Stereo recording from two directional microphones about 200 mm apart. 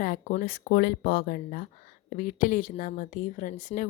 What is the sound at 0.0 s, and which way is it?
A woman's voice, 40° left (ahead or behind).